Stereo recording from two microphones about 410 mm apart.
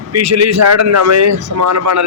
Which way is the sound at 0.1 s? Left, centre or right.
Right.